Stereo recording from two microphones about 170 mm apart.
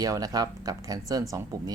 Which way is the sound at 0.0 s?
20° right (ahead or behind).